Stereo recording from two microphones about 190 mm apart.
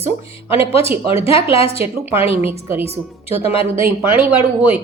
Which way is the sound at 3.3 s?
30° left (ahead or behind).